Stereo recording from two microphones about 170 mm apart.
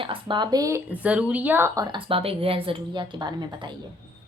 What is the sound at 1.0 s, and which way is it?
A woman's voice, 5° right (ahead or behind).